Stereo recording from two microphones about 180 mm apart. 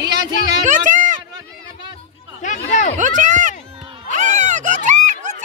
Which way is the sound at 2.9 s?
45° right (ahead or behind).